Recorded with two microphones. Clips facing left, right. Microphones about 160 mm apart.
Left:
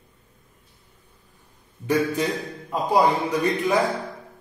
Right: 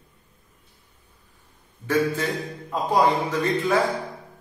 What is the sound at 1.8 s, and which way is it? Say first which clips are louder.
Speech: left 1 dB; 15° left (ahead or behind).